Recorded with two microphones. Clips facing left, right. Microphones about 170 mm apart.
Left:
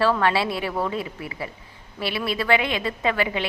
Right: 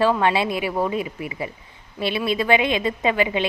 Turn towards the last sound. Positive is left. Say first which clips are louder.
# right 3 dB
turn(degrees=-20)  # may be behind; listen again after turning